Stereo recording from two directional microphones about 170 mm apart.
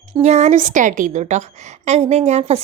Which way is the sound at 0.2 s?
40° right (ahead or behind).